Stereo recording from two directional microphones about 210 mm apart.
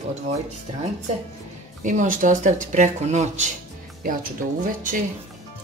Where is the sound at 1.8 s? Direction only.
40° right (ahead or behind).